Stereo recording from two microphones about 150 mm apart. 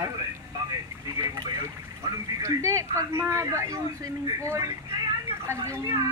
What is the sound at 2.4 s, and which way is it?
A woman's voice, 20° right (ahead or behind).